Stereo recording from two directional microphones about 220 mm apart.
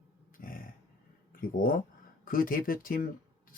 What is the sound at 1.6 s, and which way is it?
Speech, 40° left (ahead or behind).